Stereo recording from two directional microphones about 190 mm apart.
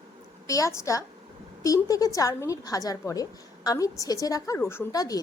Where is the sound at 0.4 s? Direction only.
15° left (ahead or behind).